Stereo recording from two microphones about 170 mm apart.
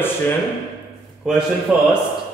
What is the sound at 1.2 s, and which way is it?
Speech, 5° right (ahead or behind).